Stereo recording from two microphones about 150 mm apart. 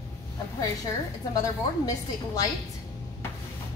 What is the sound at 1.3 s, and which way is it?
Speech, 25° left (ahead or behind).